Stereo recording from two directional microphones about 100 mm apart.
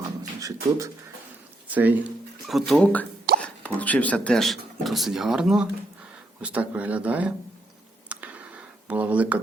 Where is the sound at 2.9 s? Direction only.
15° left (ahead or behind); by 7.3 s 15° right (ahead or behind).